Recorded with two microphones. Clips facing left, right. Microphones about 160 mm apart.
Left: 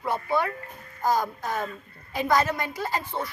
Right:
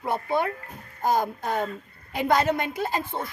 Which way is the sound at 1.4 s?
60° right (ahead or behind).